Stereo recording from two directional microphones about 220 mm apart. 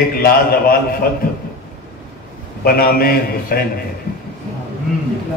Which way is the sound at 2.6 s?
45° left (ahead or behind).